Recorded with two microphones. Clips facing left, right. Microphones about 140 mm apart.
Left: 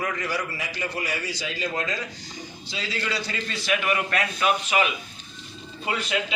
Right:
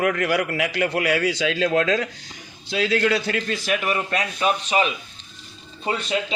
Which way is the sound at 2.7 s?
60° right (ahead or behind).